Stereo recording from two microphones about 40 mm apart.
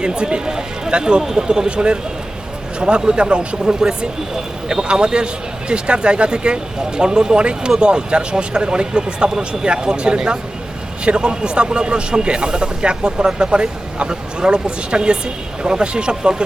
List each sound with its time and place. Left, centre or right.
0.0 s speech: right